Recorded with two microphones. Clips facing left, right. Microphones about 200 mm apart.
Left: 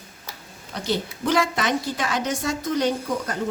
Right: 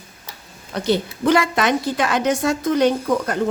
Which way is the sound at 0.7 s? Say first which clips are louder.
Right 6 dB; 60° right (ahead or behind).